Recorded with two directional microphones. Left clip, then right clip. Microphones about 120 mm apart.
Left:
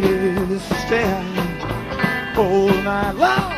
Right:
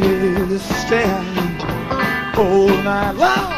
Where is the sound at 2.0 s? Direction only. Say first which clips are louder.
Right 1 dB; 30° right (ahead or behind).